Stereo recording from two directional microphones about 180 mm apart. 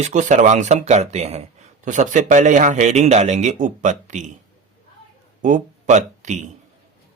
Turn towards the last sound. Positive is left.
turn(degrees=-40)  # may be behind; listen again after turning